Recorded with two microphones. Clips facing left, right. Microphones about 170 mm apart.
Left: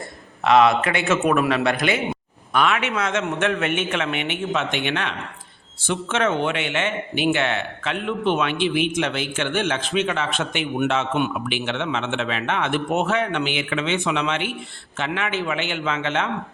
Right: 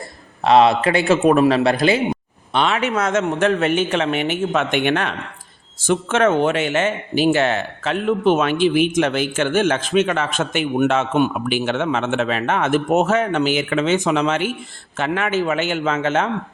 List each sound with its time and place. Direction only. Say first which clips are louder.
0.4 s a man's voice: right 3 dB; 30° right (ahead or behind)
4.5 s a man's voice: right 6 dB; 50° right (ahead or behind)